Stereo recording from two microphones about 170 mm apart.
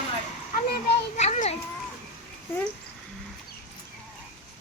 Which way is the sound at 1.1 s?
45° left (ahead or behind).